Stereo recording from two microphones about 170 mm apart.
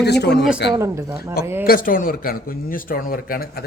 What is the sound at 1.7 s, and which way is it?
Speech, 55° left (ahead or behind).